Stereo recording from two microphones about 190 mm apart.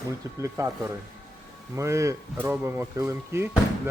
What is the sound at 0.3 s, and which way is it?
Speech, 15° right (ahead or behind).